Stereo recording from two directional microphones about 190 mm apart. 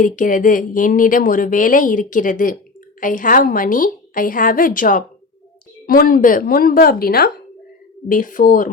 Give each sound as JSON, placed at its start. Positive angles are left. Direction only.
{"t": 0.0, "sound": "speech", "side_deg": 45}